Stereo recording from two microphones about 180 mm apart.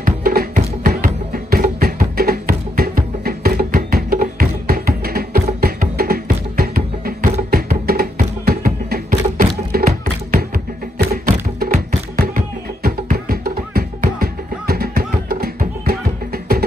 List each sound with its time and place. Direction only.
0.0 s music: 55° right (ahead or behind)